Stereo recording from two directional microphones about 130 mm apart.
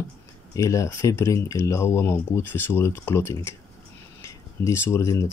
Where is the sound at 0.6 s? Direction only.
25° left (ahead or behind).